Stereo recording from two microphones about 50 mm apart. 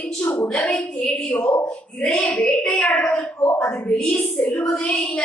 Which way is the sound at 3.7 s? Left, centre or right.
Left.